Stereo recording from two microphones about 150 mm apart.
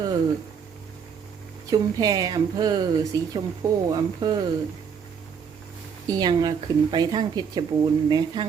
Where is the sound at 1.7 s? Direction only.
25° right (ahead or behind).